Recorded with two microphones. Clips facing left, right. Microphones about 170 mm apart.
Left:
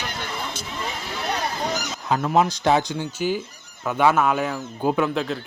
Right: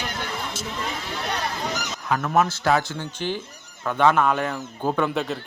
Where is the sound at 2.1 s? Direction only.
20° left (ahead or behind).